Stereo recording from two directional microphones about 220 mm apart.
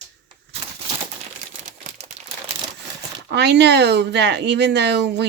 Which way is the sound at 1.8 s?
35° right (ahead or behind).